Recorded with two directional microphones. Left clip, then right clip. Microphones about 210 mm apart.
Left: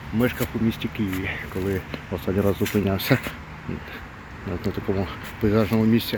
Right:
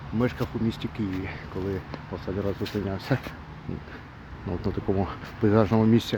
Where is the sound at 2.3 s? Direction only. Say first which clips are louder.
Left 7 dB; 25° left (ahead or behind).